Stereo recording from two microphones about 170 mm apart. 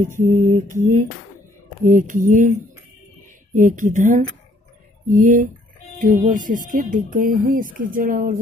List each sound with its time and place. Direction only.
0.2 s speech: 50° right (ahead or behind)
1.9 s speech: 50° right (ahead or behind)
3.5 s speech: 50° right (ahead or behind)